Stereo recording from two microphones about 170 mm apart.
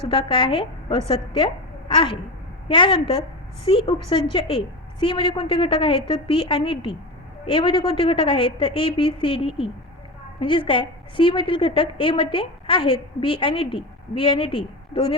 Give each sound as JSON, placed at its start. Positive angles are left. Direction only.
{"t": 0.1, "sound": "a woman's voice", "side_deg": 30}
{"t": 1.9, "sound": "a sound", "side_deg": 30}
{"t": 2.6, "sound": "a woman's voice", "side_deg": 30}